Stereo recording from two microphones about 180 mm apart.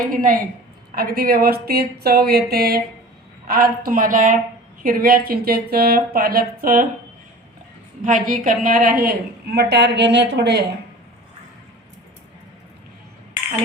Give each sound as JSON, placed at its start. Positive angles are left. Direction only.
{"t": 0.1, "sound": "a woman's voice", "side_deg": -50}
{"t": 8.0, "sound": "a woman's voice", "side_deg": -45}